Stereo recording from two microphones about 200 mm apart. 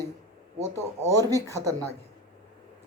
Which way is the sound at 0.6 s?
15° left (ahead or behind).